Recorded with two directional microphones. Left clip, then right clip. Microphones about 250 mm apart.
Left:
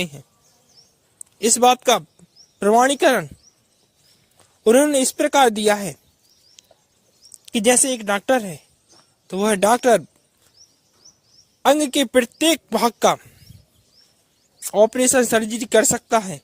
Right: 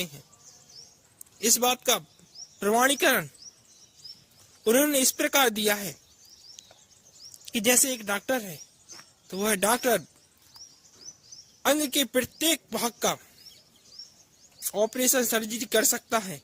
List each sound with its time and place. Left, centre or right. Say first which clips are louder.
1.4 s speech: left 10 dB; left
4.6 s speech: left 8 dB; left
6.6 s a sound: left 4 dB; left
7.4 s speech: left 7 dB; left
11.6 s a man's voice: left 8 dB; left
14.6 s speech: left 10 dB; left